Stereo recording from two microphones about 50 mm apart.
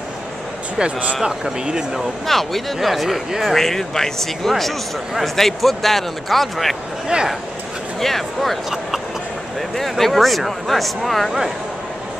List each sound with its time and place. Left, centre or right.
0.7 s speech: right
1.1 s speech: centre
2.2 s speech: centre
3.5 s speech: centre
8.0 s speech: centre